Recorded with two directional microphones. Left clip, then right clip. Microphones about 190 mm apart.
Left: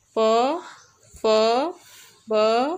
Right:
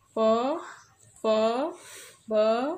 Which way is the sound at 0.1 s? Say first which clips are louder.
Left 5 dB; 50° left (ahead or behind).